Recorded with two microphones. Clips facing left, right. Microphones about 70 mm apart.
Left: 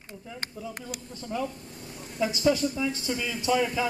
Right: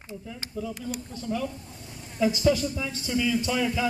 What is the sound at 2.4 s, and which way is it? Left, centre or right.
Speech, left.